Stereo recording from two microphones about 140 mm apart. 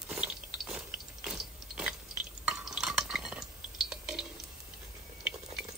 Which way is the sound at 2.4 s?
5° right (ahead or behind).